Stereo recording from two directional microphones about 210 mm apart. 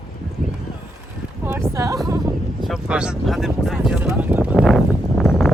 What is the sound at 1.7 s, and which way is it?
Speech, 15° right (ahead or behind).